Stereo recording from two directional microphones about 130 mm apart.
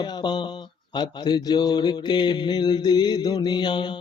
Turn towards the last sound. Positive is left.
turn(degrees=35)  # may be behind; listen again after turning